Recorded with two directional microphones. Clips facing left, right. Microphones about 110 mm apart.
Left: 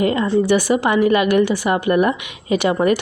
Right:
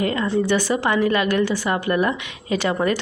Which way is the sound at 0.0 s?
15° left (ahead or behind).